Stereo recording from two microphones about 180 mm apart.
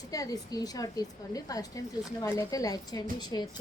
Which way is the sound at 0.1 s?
20° left (ahead or behind).